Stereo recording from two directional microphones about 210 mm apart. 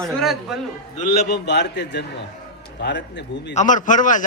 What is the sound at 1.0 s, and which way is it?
A man's voice, 50° left (ahead or behind).